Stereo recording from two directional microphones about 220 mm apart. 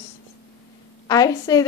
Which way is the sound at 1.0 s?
15° left (ahead or behind).